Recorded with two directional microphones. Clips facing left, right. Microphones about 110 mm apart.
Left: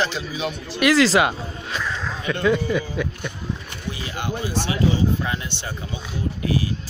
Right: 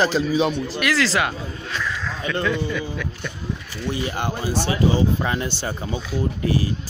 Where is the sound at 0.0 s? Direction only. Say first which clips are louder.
Right 6 dB; 40° right (ahead or behind).